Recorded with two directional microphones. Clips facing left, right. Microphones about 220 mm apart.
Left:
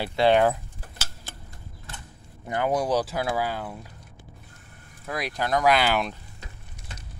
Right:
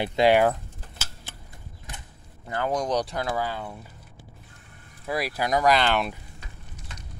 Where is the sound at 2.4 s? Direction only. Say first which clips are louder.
Left 2 dB; 20° left (ahead or behind).